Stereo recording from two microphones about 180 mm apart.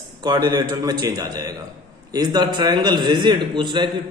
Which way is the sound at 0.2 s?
25° right (ahead or behind).